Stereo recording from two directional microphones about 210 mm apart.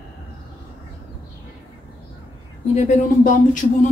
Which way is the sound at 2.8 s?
35° left (ahead or behind).